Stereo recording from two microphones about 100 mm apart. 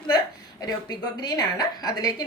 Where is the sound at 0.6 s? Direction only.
45° left (ahead or behind).